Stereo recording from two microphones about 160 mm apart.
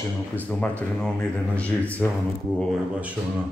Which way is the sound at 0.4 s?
10° left (ahead or behind).